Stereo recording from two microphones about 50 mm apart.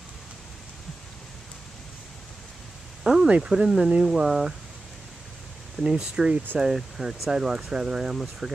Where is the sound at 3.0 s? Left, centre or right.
Centre.